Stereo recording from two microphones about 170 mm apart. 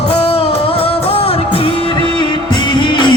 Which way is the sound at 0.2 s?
35° left (ahead or behind).